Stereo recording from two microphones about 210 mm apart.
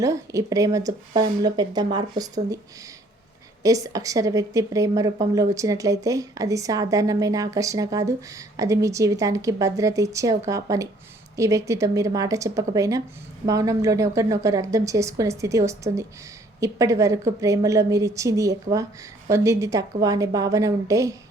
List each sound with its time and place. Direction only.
0.0 s a woman's voice: 15° right (ahead or behind)
3.6 s a woman's voice: 15° right (ahead or behind)